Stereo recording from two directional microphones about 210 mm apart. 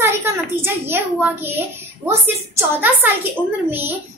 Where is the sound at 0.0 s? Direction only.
15° right (ahead or behind).